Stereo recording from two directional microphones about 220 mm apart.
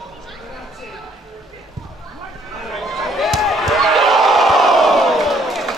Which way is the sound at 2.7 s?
Centre (ahead or behind).